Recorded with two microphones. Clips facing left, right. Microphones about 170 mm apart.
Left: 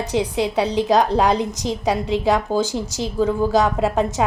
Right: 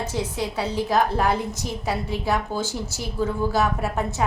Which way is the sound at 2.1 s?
90° left.